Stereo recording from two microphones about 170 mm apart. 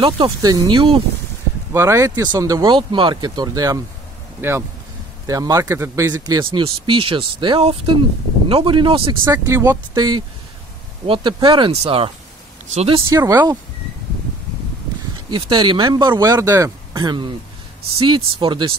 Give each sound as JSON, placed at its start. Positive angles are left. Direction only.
{"t": 0.0, "sound": "speech", "side_deg": -25}
{"t": 1.7, "sound": "speech", "side_deg": -15}
{"t": 9.2, "sound": "speech", "side_deg": -15}
{"t": 13.1, "sound": "speech", "side_deg": -20}
{"t": 15.2, "sound": "speech", "side_deg": -25}